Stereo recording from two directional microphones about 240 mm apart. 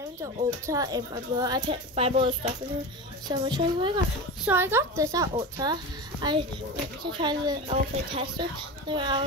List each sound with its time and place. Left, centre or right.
0.7 s speech: centre